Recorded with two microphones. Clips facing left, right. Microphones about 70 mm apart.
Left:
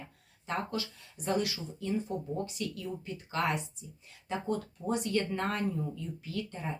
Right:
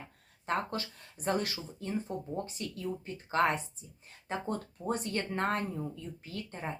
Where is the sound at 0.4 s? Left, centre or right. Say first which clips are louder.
Right 1 dB; right.